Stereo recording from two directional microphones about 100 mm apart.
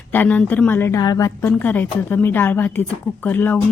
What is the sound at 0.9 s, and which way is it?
Speech, 40° left (ahead or behind).